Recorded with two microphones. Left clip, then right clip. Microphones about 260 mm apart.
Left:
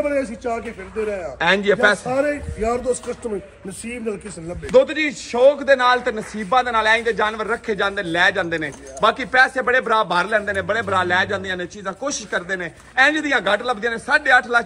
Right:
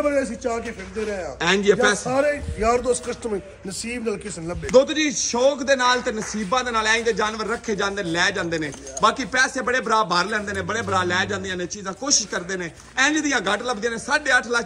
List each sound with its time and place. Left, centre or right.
0.0 s a man's voice: right
1.4 s a man's voice: centre
2.0 s a man's voice: right
2.6 s speech: right
3.9 s a man's voice: centre